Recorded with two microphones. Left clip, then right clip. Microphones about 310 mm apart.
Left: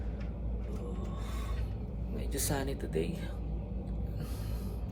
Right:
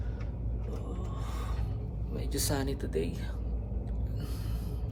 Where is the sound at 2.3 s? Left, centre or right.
Centre.